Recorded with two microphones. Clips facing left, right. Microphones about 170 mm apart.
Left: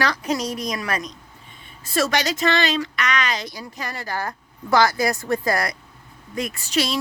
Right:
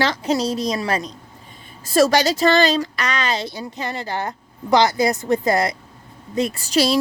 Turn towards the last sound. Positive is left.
turn(degrees=-35)  # may be behind; listen again after turning